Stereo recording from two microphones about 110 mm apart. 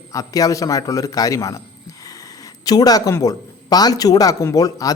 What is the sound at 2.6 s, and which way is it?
A man's voice, 35° left (ahead or behind).